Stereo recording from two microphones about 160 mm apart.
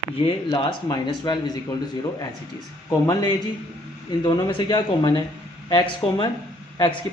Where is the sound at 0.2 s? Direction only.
30° left (ahead or behind).